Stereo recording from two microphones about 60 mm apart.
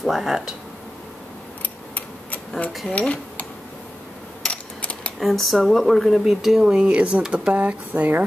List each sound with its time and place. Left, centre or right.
0.0 s speech: centre
1.6 s tick-tock: left
2.9 s speech: left
4.5 s a sound: centre
5.2 s speech: centre; by 8.2 s right